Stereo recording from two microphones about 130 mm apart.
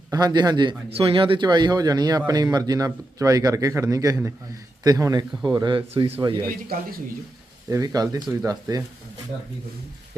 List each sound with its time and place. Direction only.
0.1 s speech: 30° right (ahead or behind)
5.9 s speech: 50° right (ahead or behind)
7.7 s speech: 25° right (ahead or behind)